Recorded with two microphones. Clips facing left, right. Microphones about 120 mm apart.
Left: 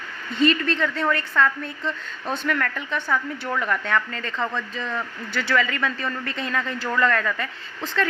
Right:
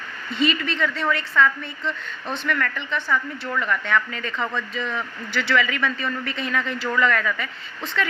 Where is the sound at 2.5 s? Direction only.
40° left (ahead or behind).